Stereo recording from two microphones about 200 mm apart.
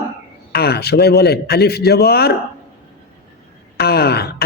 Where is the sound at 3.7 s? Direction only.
55° left (ahead or behind).